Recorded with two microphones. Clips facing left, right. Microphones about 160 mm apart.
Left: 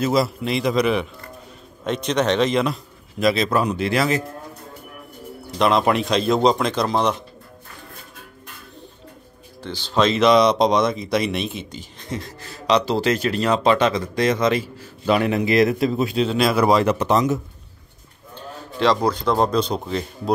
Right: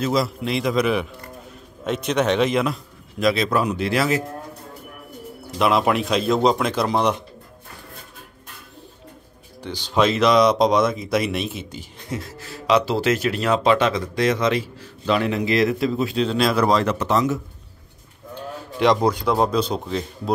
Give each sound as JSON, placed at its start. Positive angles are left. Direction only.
{"t": 0.0, "sound": "speech", "side_deg": 5}
{"t": 5.6, "sound": "speech", "side_deg": -5}
{"t": 9.6, "sound": "a man's voice", "side_deg": -15}
{"t": 16.2, "sound": "a man's voice", "side_deg": 5}
{"t": 18.3, "sound": "speech", "side_deg": -15}